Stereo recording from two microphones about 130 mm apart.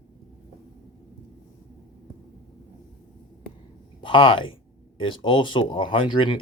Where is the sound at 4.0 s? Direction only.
40° left (ahead or behind).